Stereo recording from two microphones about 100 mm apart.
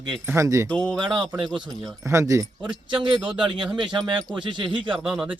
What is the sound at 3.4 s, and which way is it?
Speech, 55° right (ahead or behind).